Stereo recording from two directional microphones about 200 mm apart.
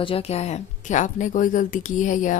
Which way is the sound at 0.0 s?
30° left (ahead or behind).